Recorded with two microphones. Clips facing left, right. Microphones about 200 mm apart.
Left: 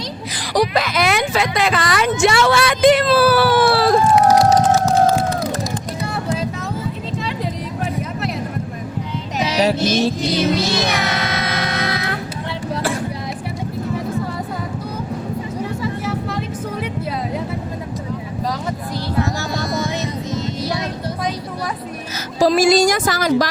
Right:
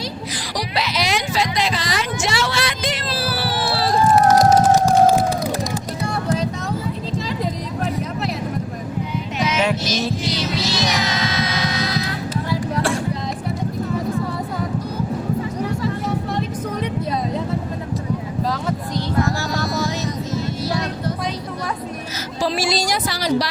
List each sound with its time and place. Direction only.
0.5 s speech: 50° left (ahead or behind)
4.2 s a sound: 5° left (ahead or behind)
4.5 s music: 10° right (ahead or behind)
7.8 s a sound: centre (ahead or behind)
9.4 s music: 35° left (ahead or behind)
9.7 s speech: 55° left (ahead or behind)
10.2 s music: 55° left (ahead or behind)
16.8 s music: 10° left (ahead or behind)
19.8 s music: 20° left (ahead or behind)
20.6 s vehicle: 15° left (ahead or behind)
22.4 s speech: 45° left (ahead or behind)